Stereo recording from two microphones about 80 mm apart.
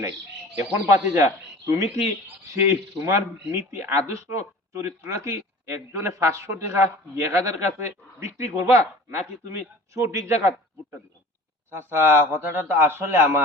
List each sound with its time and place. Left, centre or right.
0.5 s speech: right
11.7 s speech: right